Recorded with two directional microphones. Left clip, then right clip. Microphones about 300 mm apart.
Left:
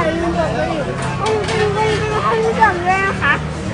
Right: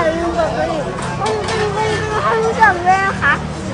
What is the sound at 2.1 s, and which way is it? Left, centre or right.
Speech, centre.